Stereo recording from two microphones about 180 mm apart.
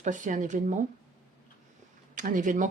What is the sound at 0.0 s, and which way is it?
Speech, 45° right (ahead or behind).